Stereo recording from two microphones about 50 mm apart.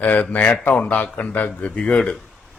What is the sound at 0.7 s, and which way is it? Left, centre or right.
Speech, left.